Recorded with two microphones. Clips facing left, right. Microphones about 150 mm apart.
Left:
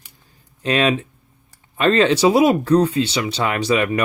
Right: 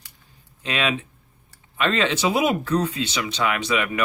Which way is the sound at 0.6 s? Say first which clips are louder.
Left 7 dB; 40° left (ahead or behind).